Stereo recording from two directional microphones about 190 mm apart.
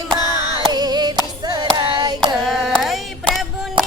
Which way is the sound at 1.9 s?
25° right (ahead or behind).